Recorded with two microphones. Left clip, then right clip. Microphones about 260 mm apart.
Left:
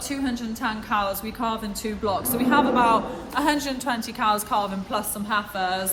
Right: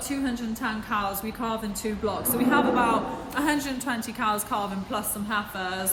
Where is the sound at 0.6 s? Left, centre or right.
Centre.